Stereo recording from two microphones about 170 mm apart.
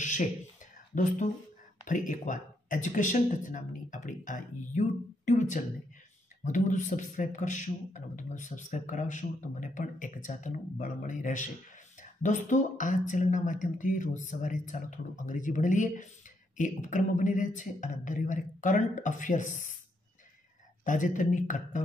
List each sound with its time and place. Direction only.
0.0 s a sound: 45° left (ahead or behind)
0.9 s a man's voice: 50° left (ahead or behind)
20.8 s a man's voice: 50° left (ahead or behind)